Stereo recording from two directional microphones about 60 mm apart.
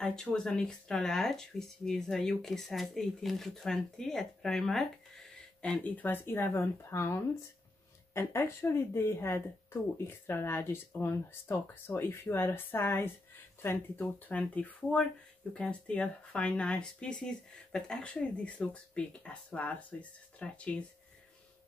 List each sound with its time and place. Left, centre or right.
0.0 s speech: centre
5.6 s speech: left